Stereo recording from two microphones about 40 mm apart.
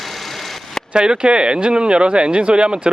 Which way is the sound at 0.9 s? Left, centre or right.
Right.